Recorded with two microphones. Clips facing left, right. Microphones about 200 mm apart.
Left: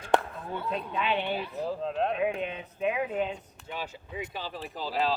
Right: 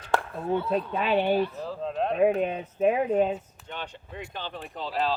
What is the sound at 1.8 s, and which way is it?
Speech, centre (ahead or behind).